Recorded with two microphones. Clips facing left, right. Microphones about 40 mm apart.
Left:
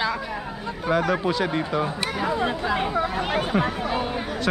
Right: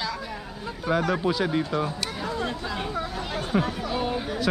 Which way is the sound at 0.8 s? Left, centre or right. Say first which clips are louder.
Left 2 dB; centre.